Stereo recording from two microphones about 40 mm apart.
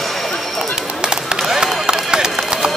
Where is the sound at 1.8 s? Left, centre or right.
Right.